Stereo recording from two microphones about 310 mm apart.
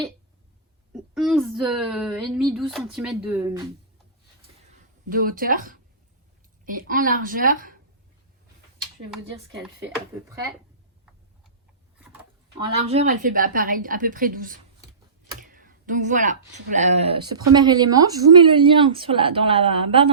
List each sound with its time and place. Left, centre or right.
1.1 s speech: centre
5.0 s a woman's voice: right
10.3 s speech: centre
11.9 s a sound: centre
12.6 s a woman's voice: centre